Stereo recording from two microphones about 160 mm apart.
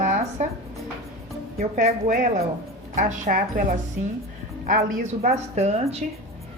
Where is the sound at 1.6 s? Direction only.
45° right (ahead or behind).